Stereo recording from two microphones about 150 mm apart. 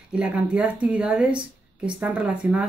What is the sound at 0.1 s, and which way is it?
Speech, 10° right (ahead or behind).